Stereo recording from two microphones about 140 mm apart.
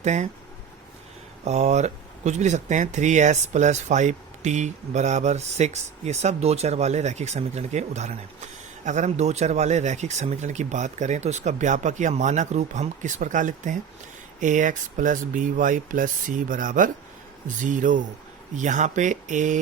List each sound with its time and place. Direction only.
0.0 s speech: 55° right (ahead or behind)
1.5 s speech: 50° right (ahead or behind)